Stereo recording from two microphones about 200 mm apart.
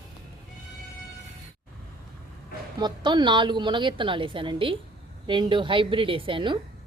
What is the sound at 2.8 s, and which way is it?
A woman's voice, 20° right (ahead or behind).